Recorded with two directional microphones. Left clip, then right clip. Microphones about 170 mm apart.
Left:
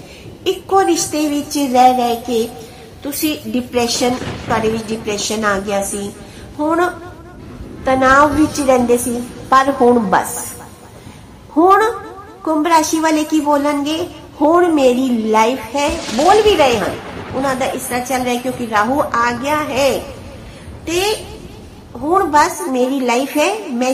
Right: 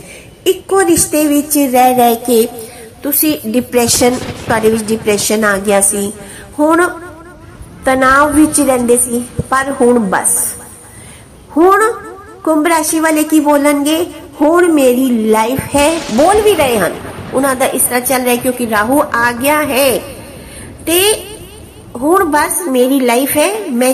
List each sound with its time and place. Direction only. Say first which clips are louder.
0.4 s a woman's voice: right 2 dB; 10° right (ahead or behind)
2.0 s a woman's voice: right 7 dB; 30° right (ahead or behind)
9.5 s a woman's voice: even; 15° right (ahead or behind)
12.4 s a woman's voice: right 2 dB; 20° right (ahead or behind)
15.3 s a woman's voice: even; 30° right (ahead or behind)